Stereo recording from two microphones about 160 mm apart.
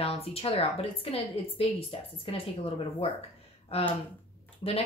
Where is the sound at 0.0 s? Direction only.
40° left (ahead or behind).